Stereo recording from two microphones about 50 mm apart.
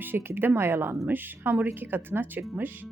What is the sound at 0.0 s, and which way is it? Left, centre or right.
Speech, right.